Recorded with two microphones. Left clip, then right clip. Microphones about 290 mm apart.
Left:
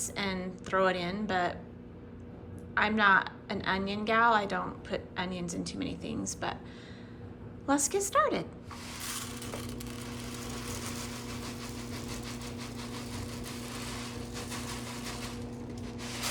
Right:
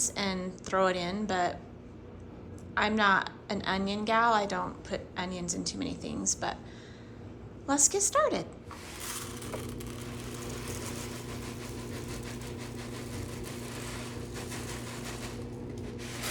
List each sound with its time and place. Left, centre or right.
0.0 s a woman's voice: centre
2.7 s a woman's voice: centre
7.7 s a woman's voice: centre
9.0 s vehicle: centre